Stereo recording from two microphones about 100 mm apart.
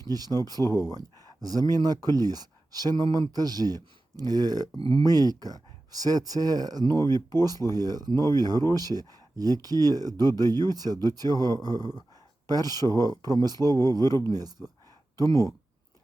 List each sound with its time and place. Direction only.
0.0 s speech: 40° right (ahead or behind)
4.8 s speech: 65° right (ahead or behind)
5.0 s speech: 40° right (ahead or behind)
15.3 s speech: 35° left (ahead or behind)